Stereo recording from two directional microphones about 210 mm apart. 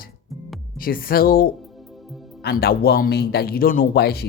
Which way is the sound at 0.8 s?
45° left (ahead or behind).